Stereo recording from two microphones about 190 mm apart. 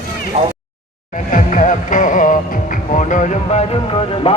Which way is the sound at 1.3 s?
40° left (ahead or behind).